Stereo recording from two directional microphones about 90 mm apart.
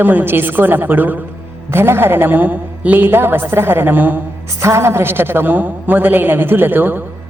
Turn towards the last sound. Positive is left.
turn(degrees=-20)  # may be behind; listen again after turning